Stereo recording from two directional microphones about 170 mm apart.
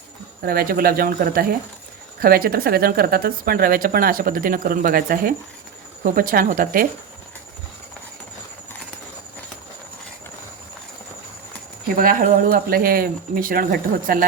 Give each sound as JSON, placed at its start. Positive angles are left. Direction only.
{"t": 0.4, "sound": "speech", "side_deg": -60}
{"t": 11.9, "sound": "speech", "side_deg": -55}